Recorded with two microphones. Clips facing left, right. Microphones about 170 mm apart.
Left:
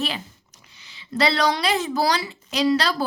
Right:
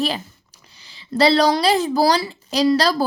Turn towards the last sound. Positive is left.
turn(degrees=-35)  # may be behind; listen again after turning